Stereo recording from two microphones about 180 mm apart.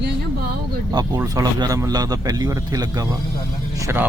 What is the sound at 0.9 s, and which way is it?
Speech, 20° right (ahead or behind).